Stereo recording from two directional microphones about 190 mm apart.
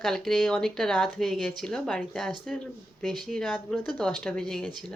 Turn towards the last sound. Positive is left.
turn(degrees=0)  # may be behind; listen again after turning